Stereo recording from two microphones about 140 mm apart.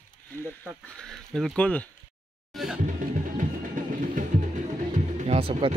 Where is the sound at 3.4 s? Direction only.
70° right (ahead or behind).